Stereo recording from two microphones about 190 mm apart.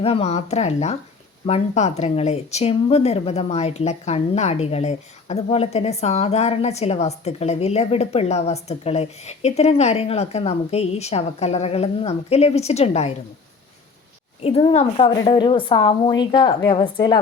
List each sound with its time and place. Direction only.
0.0 s speech: 30° left (ahead or behind)
14.4 s a woman's voice: 30° left (ahead or behind)